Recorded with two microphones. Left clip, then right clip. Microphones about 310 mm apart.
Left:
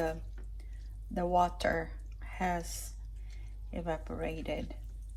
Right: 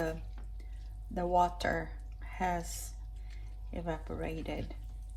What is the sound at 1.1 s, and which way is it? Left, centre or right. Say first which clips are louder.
A woman's voice: even; left.